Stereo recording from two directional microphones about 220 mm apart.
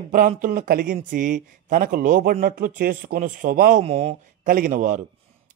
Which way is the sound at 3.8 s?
30° right (ahead or behind).